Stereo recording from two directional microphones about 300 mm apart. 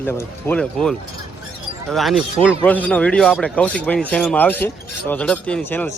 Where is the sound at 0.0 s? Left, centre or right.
Centre.